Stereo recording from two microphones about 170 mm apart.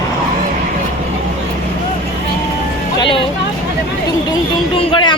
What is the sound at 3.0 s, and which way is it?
Speech, 30° left (ahead or behind).